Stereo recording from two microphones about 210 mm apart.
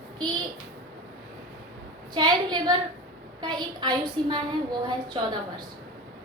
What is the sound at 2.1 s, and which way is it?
A woman's voice, 20° right (ahead or behind).